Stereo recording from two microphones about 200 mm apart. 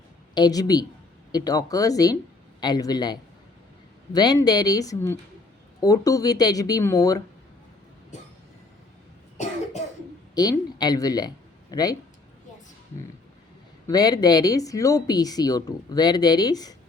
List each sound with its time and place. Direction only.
0.3 s speech: 20° left (ahead or behind)
10.3 s speech: 20° left (ahead or behind)
13.8 s speech: 20° left (ahead or behind)